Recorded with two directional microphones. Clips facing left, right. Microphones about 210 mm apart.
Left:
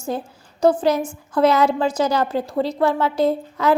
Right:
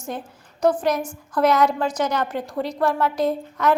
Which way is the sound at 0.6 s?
25° left (ahead or behind).